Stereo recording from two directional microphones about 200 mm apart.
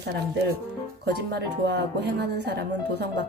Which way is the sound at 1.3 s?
55° right (ahead or behind).